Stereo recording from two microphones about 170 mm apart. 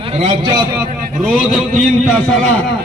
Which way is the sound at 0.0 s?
35° right (ahead or behind).